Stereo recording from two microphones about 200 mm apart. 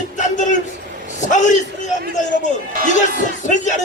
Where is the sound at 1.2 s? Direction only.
40° left (ahead or behind).